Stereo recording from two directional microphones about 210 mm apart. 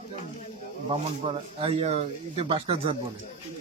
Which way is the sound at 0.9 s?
25° right (ahead or behind).